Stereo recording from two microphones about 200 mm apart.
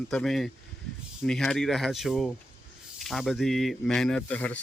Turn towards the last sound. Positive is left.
turn(degrees=5)  # may be behind; listen again after turning